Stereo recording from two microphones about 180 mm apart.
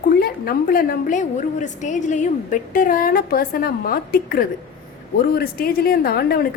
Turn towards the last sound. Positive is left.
turn(degrees=60)  # may be behind; listen again after turning